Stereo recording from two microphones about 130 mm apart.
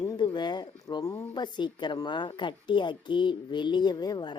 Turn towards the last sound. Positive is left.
turn(degrees=35)  # may be behind; listen again after turning